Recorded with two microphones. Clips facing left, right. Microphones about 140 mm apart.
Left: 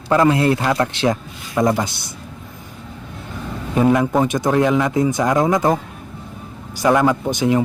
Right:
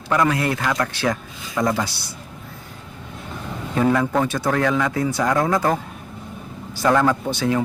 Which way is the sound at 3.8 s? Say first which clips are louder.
Left 3 dB; 15° left (ahead or behind).